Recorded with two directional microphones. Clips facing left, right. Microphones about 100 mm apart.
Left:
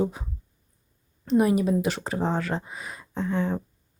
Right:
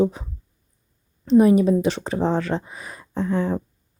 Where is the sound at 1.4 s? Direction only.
30° right (ahead or behind).